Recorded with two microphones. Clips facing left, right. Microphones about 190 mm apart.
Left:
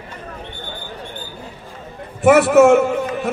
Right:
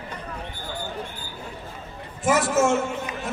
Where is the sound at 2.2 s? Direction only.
60° left (ahead or behind).